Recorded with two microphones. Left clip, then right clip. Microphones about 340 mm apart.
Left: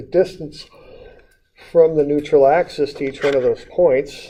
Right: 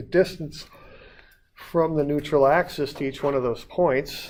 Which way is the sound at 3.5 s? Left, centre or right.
Right.